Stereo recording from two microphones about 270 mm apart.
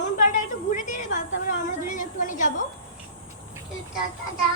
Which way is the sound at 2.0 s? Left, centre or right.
Left.